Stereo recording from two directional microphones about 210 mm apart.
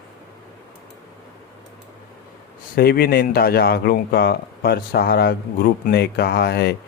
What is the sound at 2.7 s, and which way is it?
Speech, 45° left (ahead or behind).